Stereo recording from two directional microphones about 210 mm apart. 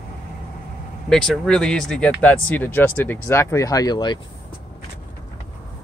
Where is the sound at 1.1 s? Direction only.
5° left (ahead or behind); by 4.1 s 20° left (ahead or behind).